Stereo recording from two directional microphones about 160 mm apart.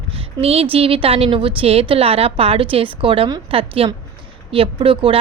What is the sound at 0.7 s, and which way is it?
A woman's voice, 35° right (ahead or behind).